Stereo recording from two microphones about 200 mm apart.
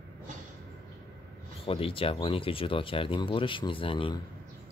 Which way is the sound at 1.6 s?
25° left (ahead or behind).